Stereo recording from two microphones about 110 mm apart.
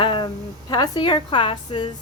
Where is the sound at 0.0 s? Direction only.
50° left (ahead or behind).